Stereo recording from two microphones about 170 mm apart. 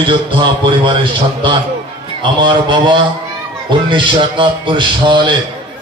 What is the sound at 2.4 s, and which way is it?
A man's voice, 30° right (ahead or behind).